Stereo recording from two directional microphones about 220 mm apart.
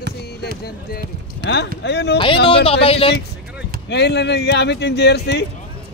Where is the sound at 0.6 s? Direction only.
40° left (ahead or behind).